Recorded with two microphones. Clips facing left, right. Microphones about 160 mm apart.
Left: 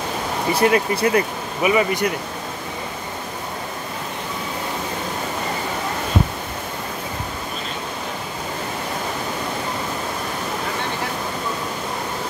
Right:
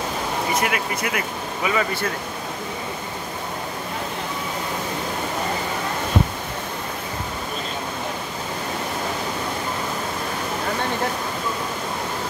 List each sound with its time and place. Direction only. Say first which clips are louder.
0.6 s speech: left 7 dB; 30° left (ahead or behind)
1.6 s speech: left 5 dB; 15° left (ahead or behind)